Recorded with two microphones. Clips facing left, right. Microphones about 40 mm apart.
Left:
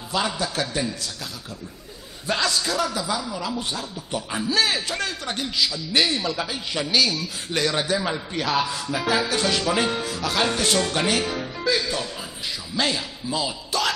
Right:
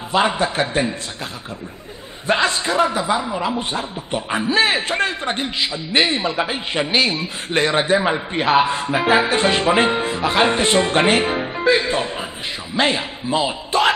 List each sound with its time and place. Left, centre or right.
0.1 s a man's voice: right
2.2 s a man's voice: right